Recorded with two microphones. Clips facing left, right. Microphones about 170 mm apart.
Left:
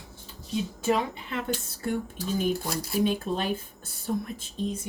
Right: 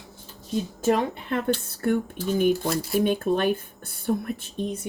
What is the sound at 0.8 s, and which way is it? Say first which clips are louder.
Speech: right 4 dB; 50° right (ahead or behind).